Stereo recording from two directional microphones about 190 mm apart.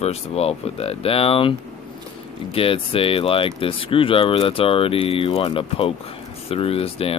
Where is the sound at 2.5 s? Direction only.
30° left (ahead or behind).